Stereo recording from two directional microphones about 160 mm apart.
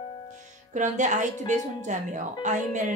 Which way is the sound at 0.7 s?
50° right (ahead or behind).